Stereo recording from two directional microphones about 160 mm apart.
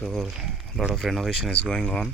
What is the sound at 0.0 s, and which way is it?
Speech, centre (ahead or behind).